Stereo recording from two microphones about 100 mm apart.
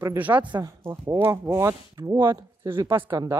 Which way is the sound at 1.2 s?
30° right (ahead or behind).